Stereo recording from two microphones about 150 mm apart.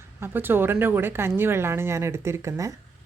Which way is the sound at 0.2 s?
15° right (ahead or behind).